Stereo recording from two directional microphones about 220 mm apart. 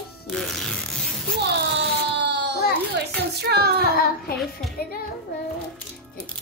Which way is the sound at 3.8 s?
45° left (ahead or behind).